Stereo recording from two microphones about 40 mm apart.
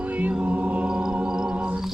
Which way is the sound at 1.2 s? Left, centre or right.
Centre.